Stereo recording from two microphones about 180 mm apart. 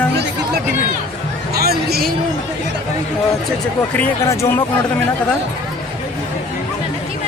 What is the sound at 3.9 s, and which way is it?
Speech, 10° left (ahead or behind).